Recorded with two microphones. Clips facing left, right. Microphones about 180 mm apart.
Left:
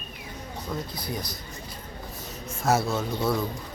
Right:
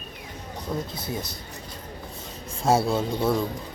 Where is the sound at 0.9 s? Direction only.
25° right (ahead or behind).